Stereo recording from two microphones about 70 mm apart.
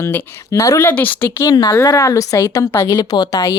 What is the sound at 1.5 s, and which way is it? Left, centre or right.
Speech, left.